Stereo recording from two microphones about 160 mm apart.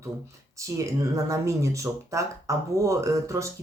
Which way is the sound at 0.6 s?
20° right (ahead or behind).